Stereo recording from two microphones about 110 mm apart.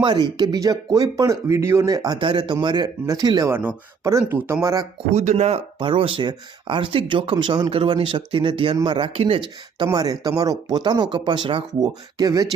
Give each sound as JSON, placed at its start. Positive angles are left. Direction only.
{"t": 0.0, "sound": "speech", "side_deg": -45}
{"t": 2.1, "sound": "speech", "side_deg": -50}
{"t": 3.5, "sound": "speech", "side_deg": -15}
{"t": 5.1, "sound": "speech", "side_deg": -90}
{"t": 5.8, "sound": "speech", "side_deg": -50}
{"t": 9.4, "sound": "speech", "side_deg": -45}
{"t": 11.8, "sound": "speech", "side_deg": -35}